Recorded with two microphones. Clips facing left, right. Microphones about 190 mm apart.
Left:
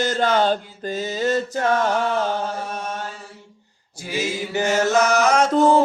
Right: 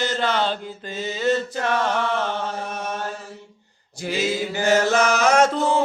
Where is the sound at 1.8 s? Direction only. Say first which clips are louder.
Left 2 dB; 40° left (ahead or behind).